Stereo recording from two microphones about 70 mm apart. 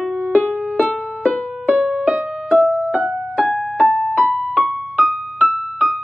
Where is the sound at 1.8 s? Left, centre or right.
Centre.